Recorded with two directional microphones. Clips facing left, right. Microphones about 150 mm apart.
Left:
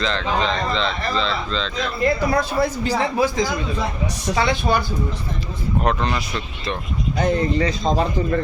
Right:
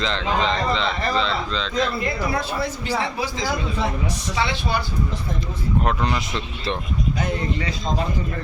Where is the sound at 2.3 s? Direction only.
40° left (ahead or behind).